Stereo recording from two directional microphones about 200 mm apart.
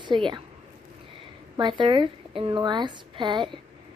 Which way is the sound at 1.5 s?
25° right (ahead or behind).